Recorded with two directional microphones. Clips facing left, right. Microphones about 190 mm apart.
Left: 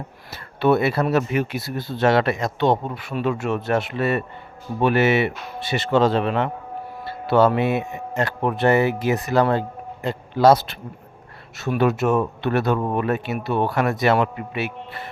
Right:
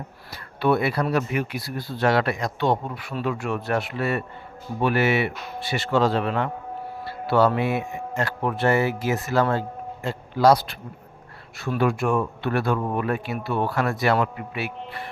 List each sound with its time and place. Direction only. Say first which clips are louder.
0.3 s speech: left 3 dB; 25° left (ahead or behind)